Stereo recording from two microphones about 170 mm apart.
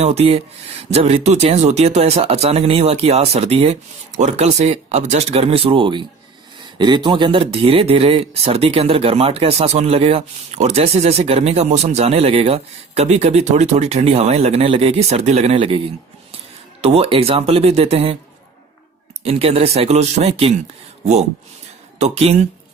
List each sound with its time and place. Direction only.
0.0 s speech: 40° right (ahead or behind)
16.8 s speech: 35° right (ahead or behind)
19.2 s speech: 35° right (ahead or behind)
21.9 s speech: 40° right (ahead or behind)